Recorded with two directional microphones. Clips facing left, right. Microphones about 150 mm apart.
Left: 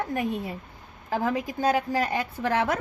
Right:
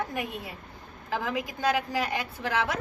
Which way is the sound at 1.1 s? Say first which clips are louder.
Left 4 dB; 45° left (ahead or behind).